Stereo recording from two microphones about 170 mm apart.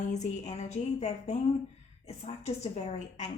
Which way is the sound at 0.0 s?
45° left (ahead or behind).